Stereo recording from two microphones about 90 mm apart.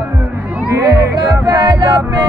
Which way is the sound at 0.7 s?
40° right (ahead or behind).